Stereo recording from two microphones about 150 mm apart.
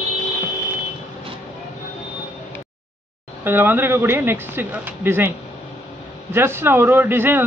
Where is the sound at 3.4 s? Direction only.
15° right (ahead or behind).